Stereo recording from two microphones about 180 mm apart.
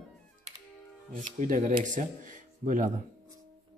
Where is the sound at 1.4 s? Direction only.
45° right (ahead or behind).